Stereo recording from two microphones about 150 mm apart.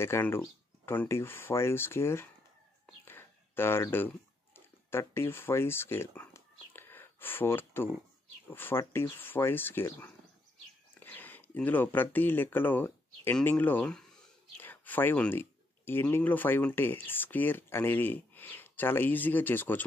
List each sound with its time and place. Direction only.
0.0 s speech: 15° left (ahead or behind)
3.1 s a sound: 15° left (ahead or behind)
8.5 s speech: 15° left (ahead or behind)